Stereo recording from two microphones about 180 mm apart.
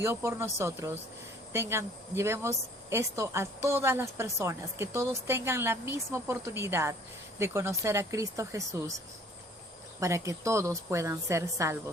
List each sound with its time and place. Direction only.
0.0 s speech: 15° right (ahead or behind)
10.0 s speech: 15° right (ahead or behind)